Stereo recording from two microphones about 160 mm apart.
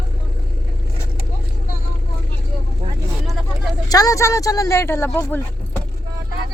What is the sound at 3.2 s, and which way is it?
Vehicle, centre (ahead or behind).